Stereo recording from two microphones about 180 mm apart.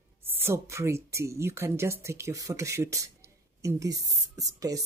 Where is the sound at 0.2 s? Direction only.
10° right (ahead or behind).